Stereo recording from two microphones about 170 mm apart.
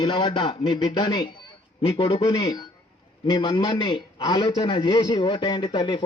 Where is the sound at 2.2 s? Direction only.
20° left (ahead or behind).